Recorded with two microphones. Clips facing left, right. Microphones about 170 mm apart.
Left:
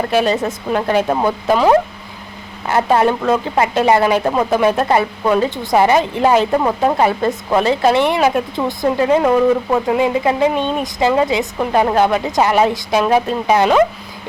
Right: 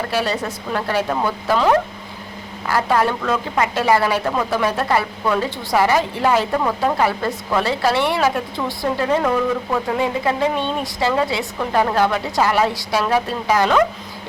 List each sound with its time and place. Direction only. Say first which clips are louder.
0.1 s speech: left 6 dB; 20° left (ahead or behind)